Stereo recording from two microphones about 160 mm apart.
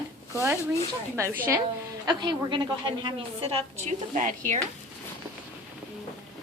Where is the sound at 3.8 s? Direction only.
50° right (ahead or behind).